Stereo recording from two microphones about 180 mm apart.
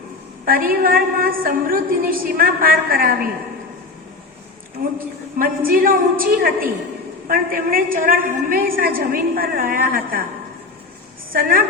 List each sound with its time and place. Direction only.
0.4 s a woman's voice: 55° right (ahead or behind)
4.8 s a woman's voice: 50° right (ahead or behind)
11.3 s a woman's voice: 50° right (ahead or behind)